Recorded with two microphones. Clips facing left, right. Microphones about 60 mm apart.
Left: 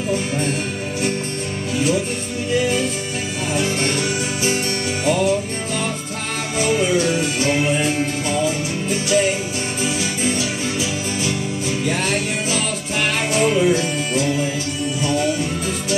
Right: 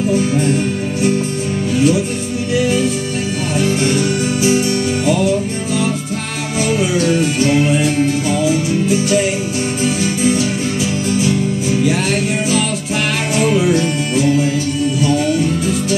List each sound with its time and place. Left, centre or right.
2.5 s music: centre
6.6 s music: centre
11.8 s music: centre